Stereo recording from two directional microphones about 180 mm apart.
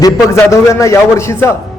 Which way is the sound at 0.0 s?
15° left (ahead or behind).